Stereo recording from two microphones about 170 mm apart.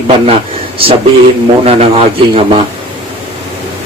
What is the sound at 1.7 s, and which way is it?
Speech, 35° right (ahead or behind).